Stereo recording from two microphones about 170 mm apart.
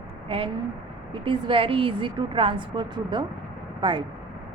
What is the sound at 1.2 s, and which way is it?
Speech, 30° right (ahead or behind).